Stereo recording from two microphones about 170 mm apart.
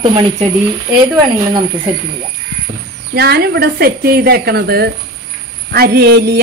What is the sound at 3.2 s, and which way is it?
A woman's voice, 75° right (ahead or behind).